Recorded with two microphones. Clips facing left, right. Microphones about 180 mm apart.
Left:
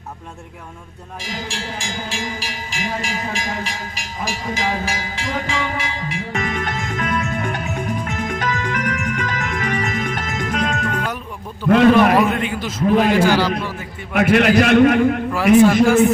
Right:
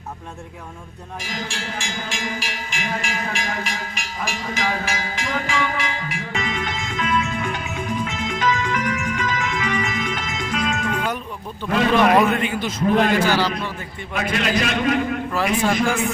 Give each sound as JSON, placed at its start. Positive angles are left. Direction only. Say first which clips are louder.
{"t": 1.3, "sound": "speech", "louder": "left 2 dB", "side_deg": 30}
{"t": 5.5, "sound": "cowbell", "louder": "even", "side_deg": 25}
{"t": 6.3, "sound": "music", "louder": "left 2 dB", "side_deg": 50}
{"t": 12.1, "sound": "a man's voice", "louder": "even", "side_deg": 0}
{"t": 14.1, "sound": "a man's voice", "louder": "left 8 dB", "side_deg": 60}
{"t": 15.3, "sound": "a man's voice", "louder": "left 10 dB", "side_deg": 10}